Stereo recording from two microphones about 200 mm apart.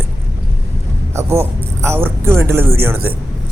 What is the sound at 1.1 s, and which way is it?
Speech, 15° right (ahead or behind).